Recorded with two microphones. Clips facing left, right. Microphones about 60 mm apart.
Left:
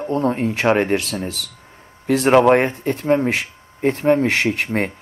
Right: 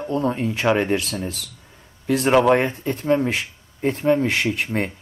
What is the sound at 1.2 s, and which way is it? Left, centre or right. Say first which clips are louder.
Speech: left 2 dB; left.